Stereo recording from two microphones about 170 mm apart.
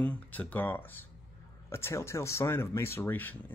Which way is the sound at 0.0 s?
10° left (ahead or behind).